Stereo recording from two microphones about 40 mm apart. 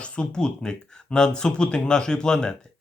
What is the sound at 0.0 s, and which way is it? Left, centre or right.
Speech, left.